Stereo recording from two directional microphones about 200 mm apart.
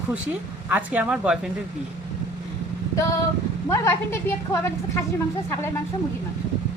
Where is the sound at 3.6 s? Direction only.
15° left (ahead or behind).